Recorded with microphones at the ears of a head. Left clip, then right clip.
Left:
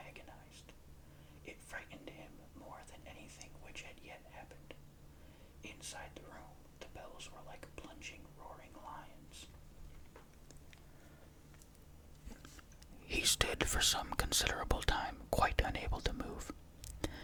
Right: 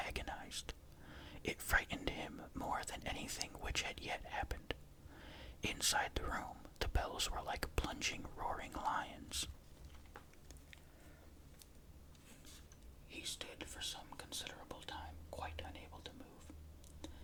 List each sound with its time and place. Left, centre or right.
0.0 s whispering: right
5.2 s speech: right
13.1 s speech: left